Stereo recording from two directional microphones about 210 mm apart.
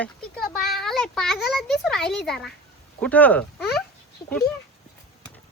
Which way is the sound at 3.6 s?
50° left (ahead or behind).